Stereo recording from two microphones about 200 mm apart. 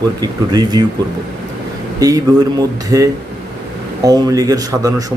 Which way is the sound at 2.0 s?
20° right (ahead or behind).